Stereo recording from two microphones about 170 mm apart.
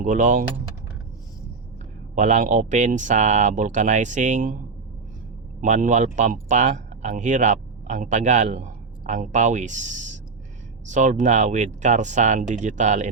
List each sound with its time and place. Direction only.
0.0 s speech: 50° right (ahead or behind)
2.1 s speech: 45° right (ahead or behind)
5.5 s speech: 45° right (ahead or behind)